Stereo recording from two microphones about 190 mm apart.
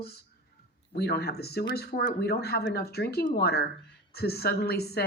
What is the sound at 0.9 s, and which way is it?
Speech, 60° left (ahead or behind).